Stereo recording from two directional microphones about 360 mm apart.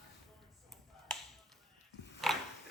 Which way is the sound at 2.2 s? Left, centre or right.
Centre.